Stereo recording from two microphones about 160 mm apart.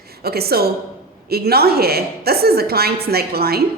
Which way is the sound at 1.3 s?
75° right (ahead or behind).